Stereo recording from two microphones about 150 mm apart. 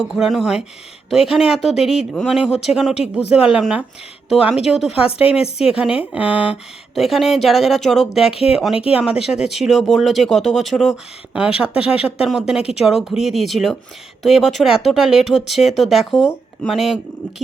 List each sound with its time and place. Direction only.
0.0 s speech: 5° right (ahead or behind)
5.2 s a woman's voice: 40° left (ahead or behind)
5.7 s speech: 5° right (ahead or behind)